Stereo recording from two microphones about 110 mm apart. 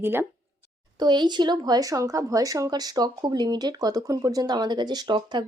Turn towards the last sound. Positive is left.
turn(degrees=-40)  # may be behind; listen again after turning